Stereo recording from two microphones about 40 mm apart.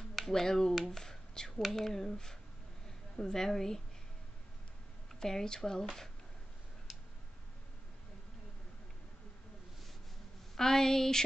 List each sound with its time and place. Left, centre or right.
0.3 s speech: centre
0.9 s a sound: centre
1.6 s speech: centre
5.2 s speech: centre
10.5 s speech: centre